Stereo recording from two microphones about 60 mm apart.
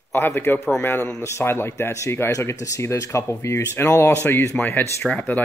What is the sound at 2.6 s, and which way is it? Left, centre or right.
Speech, left.